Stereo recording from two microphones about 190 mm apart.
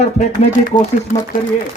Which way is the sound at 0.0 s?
40° left (ahead or behind).